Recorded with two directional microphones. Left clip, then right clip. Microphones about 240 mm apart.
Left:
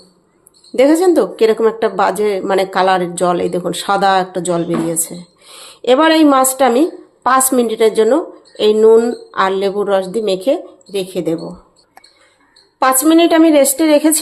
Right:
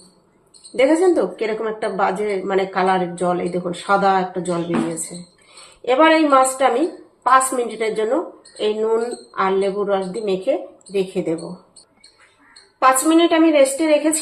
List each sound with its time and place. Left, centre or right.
0.8 s a woman's voice: left
5.8 s a woman's voice: left
12.8 s a woman's voice: left